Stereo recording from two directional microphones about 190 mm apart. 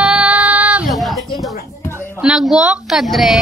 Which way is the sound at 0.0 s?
5° right (ahead or behind).